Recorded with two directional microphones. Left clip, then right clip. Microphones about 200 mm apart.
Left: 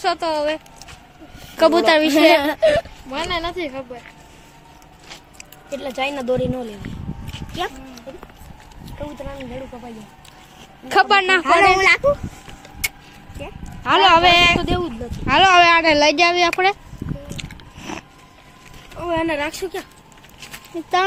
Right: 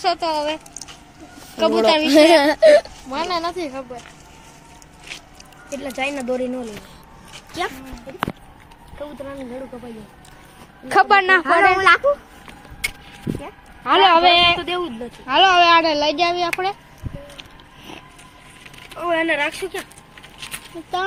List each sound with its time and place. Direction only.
0.0 s a man's voice: 15° left (ahead or behind)
1.5 s speech: 30° left (ahead or behind)
2.1 s speech: 35° right (ahead or behind)
3.1 s speech: 10° right (ahead or behind)
5.7 s speech: 40° left (ahead or behind)
7.5 s speech: centre (ahead or behind)
10.8 s speech: centre (ahead or behind)
13.8 s a man's voice: 5° left (ahead or behind)
14.5 s speech: 50° left (ahead or behind)
15.3 s speech: 25° left (ahead or behind)
15.8 s speech: 55° left (ahead or behind)
16.0 s speech: 25° left (ahead or behind)
17.4 s music: 90° left
18.9 s speech: 30° left (ahead or behind); by 19.9 s 50° left (ahead or behind)